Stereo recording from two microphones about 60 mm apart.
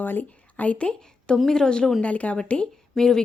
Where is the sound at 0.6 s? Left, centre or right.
Centre.